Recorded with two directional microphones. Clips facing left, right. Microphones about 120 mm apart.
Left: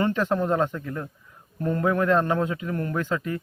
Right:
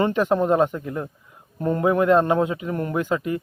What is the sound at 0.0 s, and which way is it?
A man's voice, 20° right (ahead or behind).